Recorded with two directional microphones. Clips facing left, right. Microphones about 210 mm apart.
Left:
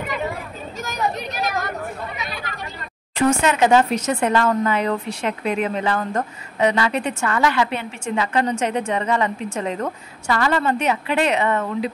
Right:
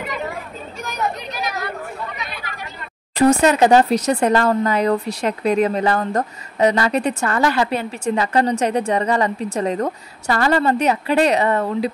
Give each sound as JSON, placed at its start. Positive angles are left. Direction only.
{"t": 0.7, "sound": "chatter", "side_deg": 45}
{"t": 3.2, "sound": "speech", "side_deg": -35}